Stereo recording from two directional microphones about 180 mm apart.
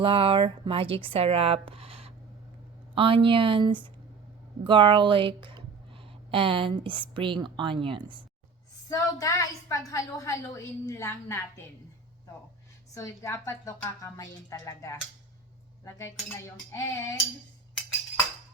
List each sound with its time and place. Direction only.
0.0 s speech: 30° right (ahead or behind)
8.9 s speech: 20° left (ahead or behind)
12.9 s speech: 15° left (ahead or behind)